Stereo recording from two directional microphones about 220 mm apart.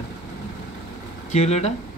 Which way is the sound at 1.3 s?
30° left (ahead or behind).